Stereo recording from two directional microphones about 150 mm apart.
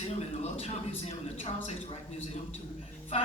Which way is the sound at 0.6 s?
45° left (ahead or behind).